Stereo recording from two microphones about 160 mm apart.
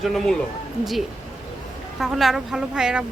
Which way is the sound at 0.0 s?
Centre (ahead or behind).